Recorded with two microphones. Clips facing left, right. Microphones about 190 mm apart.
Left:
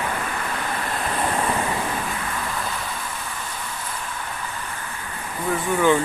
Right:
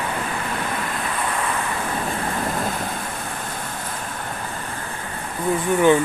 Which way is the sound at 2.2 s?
50° right (ahead or behind).